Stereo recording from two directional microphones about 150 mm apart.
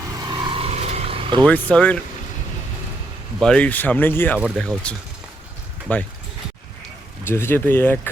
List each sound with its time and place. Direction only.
0.2 s a sound: 30° right (ahead or behind); by 1.2 s 45° right (ahead or behind)
1.4 s speech: 10° left (ahead or behind)
3.4 s speech: 5° left (ahead or behind)
4.5 s speech: centre (ahead or behind)
7.3 s speech: 15° left (ahead or behind)